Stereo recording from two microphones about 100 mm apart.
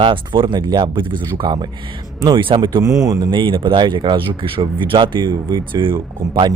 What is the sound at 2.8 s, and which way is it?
Speech, 35° right (ahead or behind).